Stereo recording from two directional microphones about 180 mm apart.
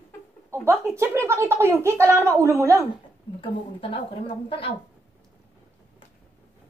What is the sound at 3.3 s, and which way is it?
A woman's voice, 30° left (ahead or behind).